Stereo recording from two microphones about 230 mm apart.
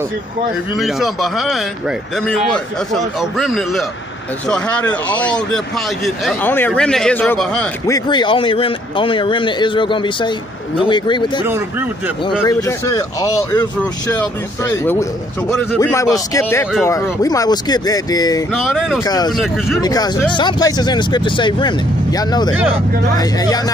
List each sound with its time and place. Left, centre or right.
0.7 s a man's voice: centre
7.9 s speech: centre
12.4 s speech: centre
18.5 s a man's voice: centre
19.0 s speech: centre
19.3 s a man's voice: centre
19.8 s speech: centre